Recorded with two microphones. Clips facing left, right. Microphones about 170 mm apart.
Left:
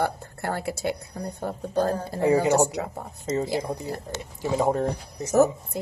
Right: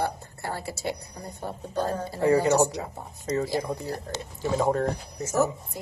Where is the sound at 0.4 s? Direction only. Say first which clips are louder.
Left 5 dB; 55° left (ahead or behind).